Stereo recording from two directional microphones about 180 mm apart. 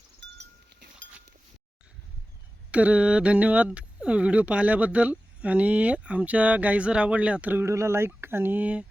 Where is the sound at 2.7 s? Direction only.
5° right (ahead or behind).